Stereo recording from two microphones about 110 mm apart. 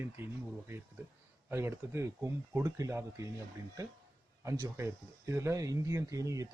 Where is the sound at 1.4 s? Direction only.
20° right (ahead or behind).